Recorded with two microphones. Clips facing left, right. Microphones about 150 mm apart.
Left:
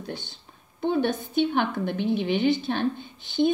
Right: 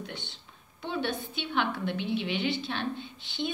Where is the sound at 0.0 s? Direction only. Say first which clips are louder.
Left 5 dB; 35° left (ahead or behind).